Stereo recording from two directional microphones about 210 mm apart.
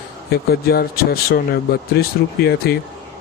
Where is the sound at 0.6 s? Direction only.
45° left (ahead or behind).